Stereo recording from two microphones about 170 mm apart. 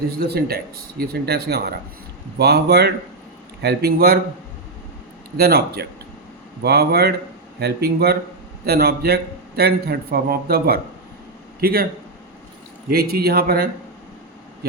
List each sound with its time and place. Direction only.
0.3 s a man's voice: 65° right (ahead or behind)
5.4 s a man's voice: 65° right (ahead or behind)
12.9 s speech: 65° right (ahead or behind)